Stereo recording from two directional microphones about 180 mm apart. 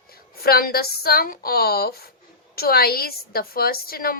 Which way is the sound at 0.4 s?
55° left (ahead or behind).